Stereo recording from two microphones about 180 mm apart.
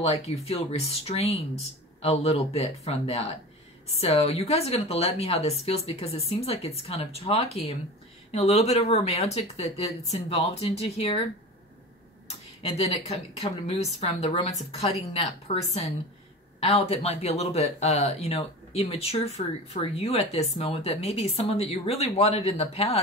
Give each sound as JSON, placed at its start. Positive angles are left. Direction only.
{"t": 0.0, "sound": "speech", "side_deg": 35}
{"t": 12.6, "sound": "speech", "side_deg": 35}